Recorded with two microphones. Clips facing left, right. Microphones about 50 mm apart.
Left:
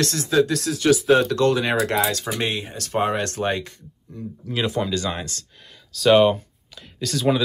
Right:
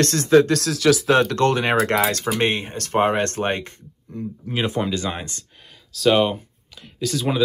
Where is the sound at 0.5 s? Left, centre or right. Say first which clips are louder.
Right 1 dB; right.